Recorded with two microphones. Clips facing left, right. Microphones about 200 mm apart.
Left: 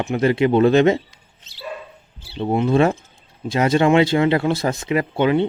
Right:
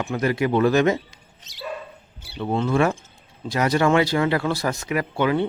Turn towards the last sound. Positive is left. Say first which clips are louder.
# left 4 dB
turn(degrees=20)  # may be behind; listen again after turning